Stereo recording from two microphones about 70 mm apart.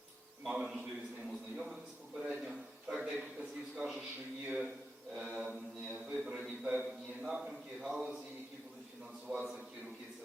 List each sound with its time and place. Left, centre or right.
0.4 s a man's voice: centre
2.1 s a sound: centre
4.4 s a man's voice: centre
5.1 s mantra: centre
5.4 s mantra: right
6.1 s a sound: centre
7.2 s a man's voice: centre